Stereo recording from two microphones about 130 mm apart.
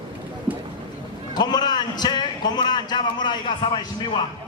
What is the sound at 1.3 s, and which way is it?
A man's voice, 35° left (ahead or behind).